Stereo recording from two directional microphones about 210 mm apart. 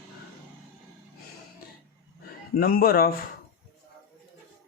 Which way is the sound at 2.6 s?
45° left (ahead or behind).